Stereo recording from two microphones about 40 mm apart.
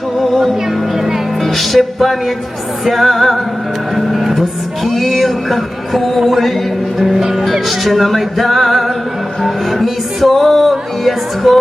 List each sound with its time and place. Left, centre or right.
0.2 s music: centre
1.4 s music: centre
7.0 s speech: centre
7.7 s music: centre